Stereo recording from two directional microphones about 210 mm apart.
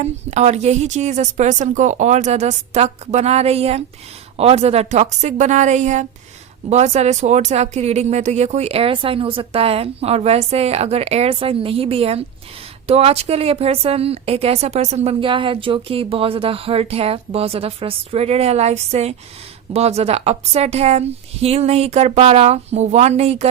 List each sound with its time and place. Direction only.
0.0 s a woman's voice: 30° right (ahead or behind)